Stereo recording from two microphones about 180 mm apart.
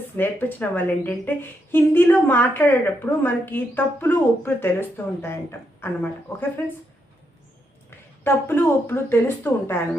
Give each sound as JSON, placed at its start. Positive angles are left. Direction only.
{"t": 0.2, "sound": "a woman's voice", "side_deg": 10}
{"t": 7.9, "sound": "speech", "side_deg": 10}